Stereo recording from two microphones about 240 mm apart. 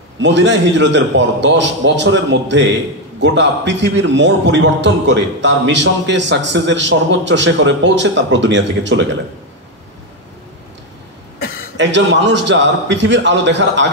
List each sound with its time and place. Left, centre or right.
0.2 s a man's voice: right
11.3 s a sound: left
11.7 s a man's voice: right